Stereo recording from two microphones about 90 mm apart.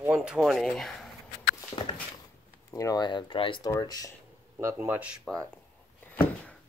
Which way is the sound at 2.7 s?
40° left (ahead or behind).